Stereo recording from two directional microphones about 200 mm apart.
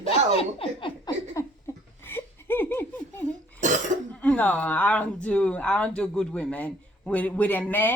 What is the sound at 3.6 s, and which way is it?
Cough, 35° right (ahead or behind).